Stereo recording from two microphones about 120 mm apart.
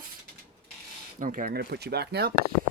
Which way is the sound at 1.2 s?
90° right.